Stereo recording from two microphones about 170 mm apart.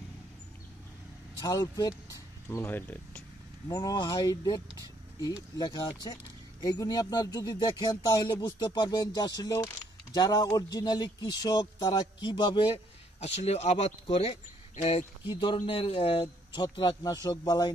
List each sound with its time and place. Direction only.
1.4 s speech: 20° left (ahead or behind); by 15.3 s 40° left (ahead or behind)
15.3 s speech: 30° left (ahead or behind)